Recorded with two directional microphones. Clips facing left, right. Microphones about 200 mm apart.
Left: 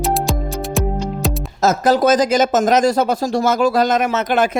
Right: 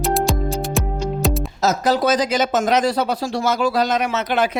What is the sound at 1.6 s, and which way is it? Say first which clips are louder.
Speech: left 5 dB; 50° left (ahead or behind).